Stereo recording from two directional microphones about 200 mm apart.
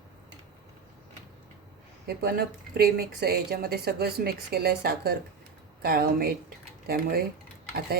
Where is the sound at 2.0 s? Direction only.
50° right (ahead or behind).